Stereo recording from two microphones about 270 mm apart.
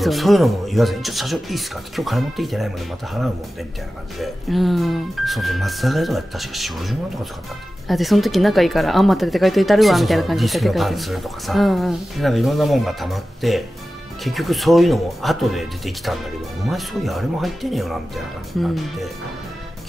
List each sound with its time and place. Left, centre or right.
0.0 s speech: centre
4.2 s speech: centre